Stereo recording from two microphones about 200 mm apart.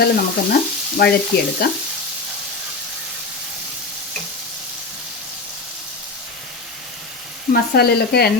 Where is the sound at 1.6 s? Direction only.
50° left (ahead or behind).